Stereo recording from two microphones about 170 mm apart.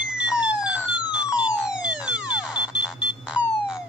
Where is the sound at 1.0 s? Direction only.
5° right (ahead or behind).